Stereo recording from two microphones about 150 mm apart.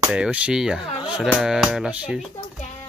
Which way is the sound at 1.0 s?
5° right (ahead or behind).